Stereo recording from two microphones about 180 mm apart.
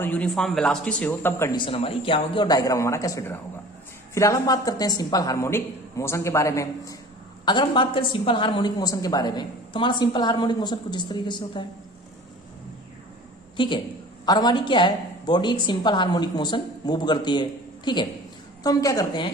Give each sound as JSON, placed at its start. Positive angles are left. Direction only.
{"t": 0.0, "sound": "a woman's voice", "side_deg": 10}
{"t": 1.5, "sound": "a woman's voice", "side_deg": 30}
{"t": 13.6, "sound": "a woman's voice", "side_deg": 25}